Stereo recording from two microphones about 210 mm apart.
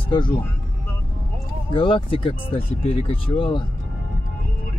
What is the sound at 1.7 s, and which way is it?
Speech, 25° left (ahead or behind).